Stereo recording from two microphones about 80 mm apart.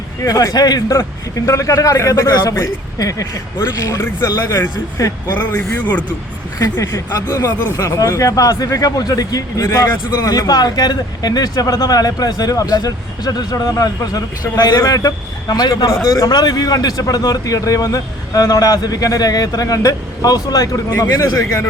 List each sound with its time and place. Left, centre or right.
0.2 s speech: left
1.5 s speech: left
5.3 s a man's voice: left
6.6 s speech: left